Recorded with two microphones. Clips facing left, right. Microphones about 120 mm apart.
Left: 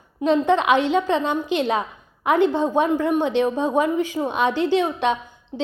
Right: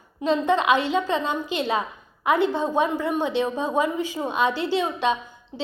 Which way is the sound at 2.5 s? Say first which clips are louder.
Left 3 dB; 15° left (ahead or behind).